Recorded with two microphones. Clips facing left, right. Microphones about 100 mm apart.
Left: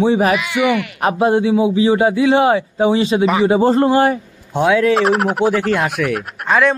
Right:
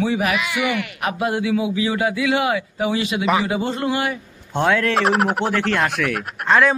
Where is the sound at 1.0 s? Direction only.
30° left (ahead or behind).